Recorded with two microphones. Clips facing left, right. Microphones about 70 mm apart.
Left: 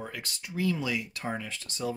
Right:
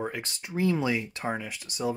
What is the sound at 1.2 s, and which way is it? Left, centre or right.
Speech, centre.